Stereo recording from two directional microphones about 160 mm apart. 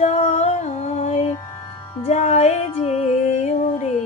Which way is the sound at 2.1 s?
45° left (ahead or behind).